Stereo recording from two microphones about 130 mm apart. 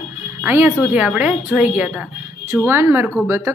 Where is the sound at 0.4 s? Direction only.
15° right (ahead or behind).